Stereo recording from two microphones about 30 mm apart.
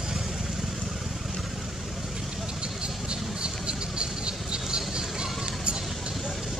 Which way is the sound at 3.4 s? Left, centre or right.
Right.